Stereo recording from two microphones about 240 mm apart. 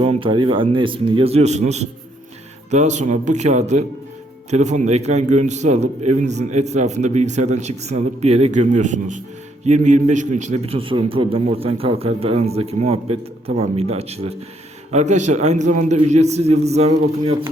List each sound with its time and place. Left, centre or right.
0.0 s a man's voice: right